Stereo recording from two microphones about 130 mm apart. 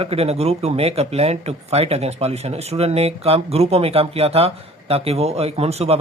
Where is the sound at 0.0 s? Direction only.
50° right (ahead or behind).